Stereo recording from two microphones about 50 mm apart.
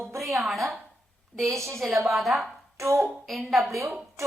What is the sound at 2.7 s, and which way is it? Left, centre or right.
Speech, right.